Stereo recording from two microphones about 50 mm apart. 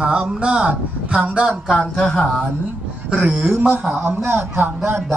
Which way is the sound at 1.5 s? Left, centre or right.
Centre.